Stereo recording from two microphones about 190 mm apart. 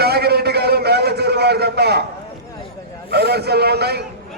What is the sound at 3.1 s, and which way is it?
Speech, 55° right (ahead or behind).